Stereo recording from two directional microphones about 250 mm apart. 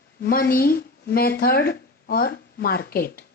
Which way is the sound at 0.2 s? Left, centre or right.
Left.